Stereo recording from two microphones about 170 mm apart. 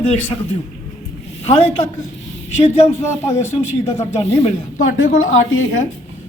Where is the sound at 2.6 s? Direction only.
35° left (ahead or behind).